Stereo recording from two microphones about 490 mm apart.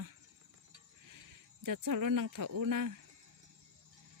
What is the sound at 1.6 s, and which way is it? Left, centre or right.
Speech, right.